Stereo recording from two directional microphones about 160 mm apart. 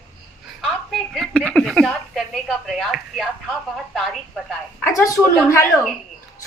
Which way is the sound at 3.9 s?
Centre (ahead or behind).